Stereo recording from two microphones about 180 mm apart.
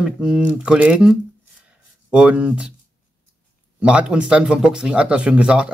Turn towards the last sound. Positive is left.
turn(degrees=-5)  # may be behind; listen again after turning